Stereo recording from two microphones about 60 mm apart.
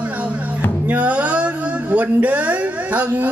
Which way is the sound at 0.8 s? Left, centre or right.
Right.